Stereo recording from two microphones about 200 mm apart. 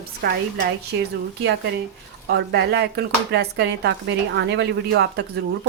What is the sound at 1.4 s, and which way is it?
Speech, 55° right (ahead or behind).